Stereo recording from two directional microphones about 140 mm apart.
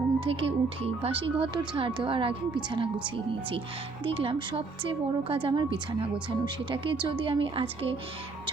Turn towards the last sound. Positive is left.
turn(degrees=-40)  # may be behind; listen again after turning